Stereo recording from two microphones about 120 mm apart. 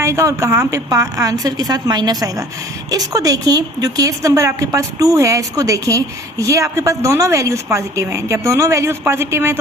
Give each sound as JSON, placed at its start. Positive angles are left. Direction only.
{"t": 0.0, "sound": "a woman's voice", "side_deg": -25}